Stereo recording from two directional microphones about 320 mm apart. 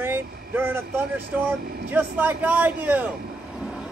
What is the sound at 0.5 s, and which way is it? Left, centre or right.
Speech, centre.